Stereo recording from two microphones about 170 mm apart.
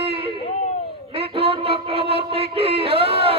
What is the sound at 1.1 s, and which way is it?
Music, 35° right (ahead or behind).